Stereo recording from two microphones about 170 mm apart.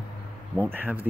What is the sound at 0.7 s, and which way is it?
Speech, 10° right (ahead or behind).